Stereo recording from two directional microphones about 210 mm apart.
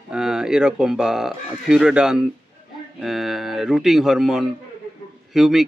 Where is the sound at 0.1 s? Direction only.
5° right (ahead or behind).